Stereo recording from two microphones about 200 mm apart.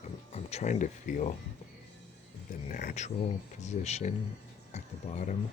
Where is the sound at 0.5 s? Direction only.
35° left (ahead or behind).